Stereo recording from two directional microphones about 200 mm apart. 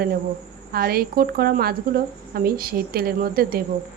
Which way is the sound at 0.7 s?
50° right (ahead or behind).